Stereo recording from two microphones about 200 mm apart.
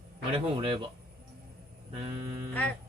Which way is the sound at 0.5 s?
25° right (ahead or behind).